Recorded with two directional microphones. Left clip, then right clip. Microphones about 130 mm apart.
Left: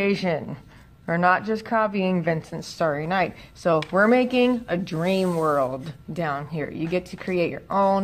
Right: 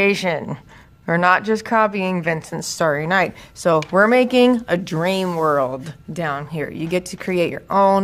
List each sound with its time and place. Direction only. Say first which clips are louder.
0.0 s a woman's voice: right 6 dB; 40° right (ahead or behind)